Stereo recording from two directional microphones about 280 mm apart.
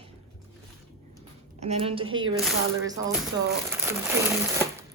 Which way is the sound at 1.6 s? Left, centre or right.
Right.